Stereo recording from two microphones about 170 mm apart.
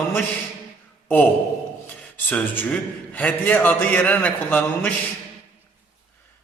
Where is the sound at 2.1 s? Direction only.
10° left (ahead or behind).